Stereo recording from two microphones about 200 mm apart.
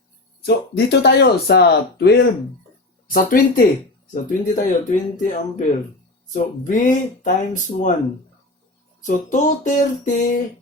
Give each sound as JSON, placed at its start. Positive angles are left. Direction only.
{"t": 0.4, "sound": "speech", "side_deg": 55}
{"t": 3.1, "sound": "speech", "side_deg": 45}
{"t": 9.0, "sound": "speech", "side_deg": 40}